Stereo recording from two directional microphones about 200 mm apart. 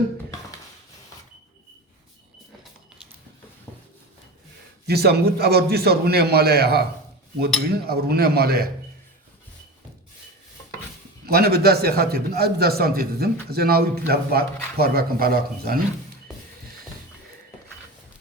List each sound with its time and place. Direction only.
4.9 s a man's voice: 55° right (ahead or behind)
11.3 s a man's voice: 50° right (ahead or behind)